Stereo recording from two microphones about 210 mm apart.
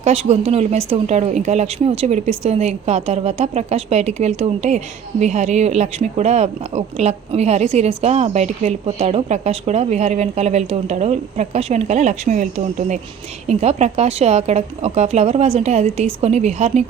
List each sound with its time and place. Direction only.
0.0 s speech: 30° right (ahead or behind)